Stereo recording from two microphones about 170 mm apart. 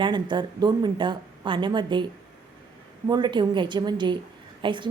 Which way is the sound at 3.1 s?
25° right (ahead or behind).